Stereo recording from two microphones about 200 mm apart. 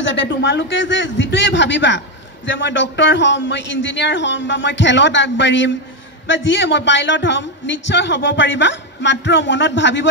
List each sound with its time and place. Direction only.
0.0 s a man's voice: 65° left (ahead or behind)